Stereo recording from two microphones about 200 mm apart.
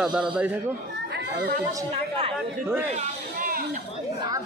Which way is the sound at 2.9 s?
35° right (ahead or behind).